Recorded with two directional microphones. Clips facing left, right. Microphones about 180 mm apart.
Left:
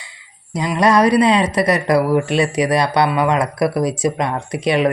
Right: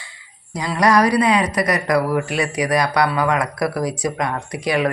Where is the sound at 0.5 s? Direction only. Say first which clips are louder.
Left 2 dB; 20° left (ahead or behind).